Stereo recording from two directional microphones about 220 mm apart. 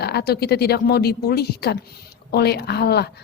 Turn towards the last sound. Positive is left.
turn(degrees=50)  # may be behind; listen again after turning